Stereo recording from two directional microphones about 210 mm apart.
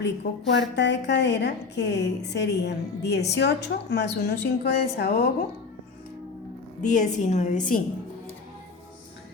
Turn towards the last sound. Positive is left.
turn(degrees=40)  # may be behind; listen again after turning